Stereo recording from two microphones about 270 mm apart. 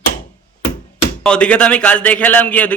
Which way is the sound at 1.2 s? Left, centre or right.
Centre.